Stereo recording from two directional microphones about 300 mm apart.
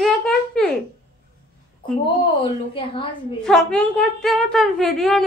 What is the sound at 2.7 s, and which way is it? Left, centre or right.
Speech, centre.